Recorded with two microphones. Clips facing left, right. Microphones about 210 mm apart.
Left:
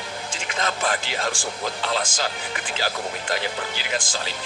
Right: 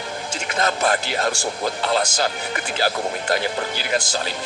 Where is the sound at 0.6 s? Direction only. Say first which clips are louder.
Right 5 dB; 40° right (ahead or behind).